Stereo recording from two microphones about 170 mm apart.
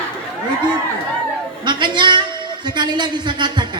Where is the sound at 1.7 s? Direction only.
25° right (ahead or behind).